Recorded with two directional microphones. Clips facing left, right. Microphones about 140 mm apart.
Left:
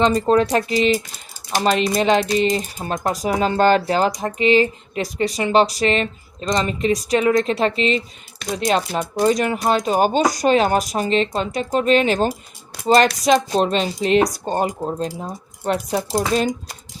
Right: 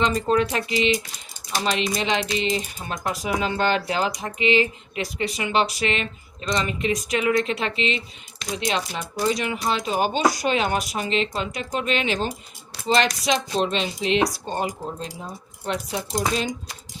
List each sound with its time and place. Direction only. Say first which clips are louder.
0.0 s speech: left 5 dB; 35° left (ahead or behind)